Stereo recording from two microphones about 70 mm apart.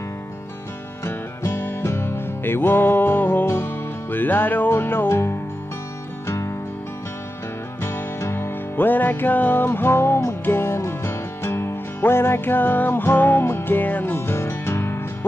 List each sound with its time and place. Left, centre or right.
1.0 s music: left
3.4 s music: left
7.8 s music: left
14.1 s music: left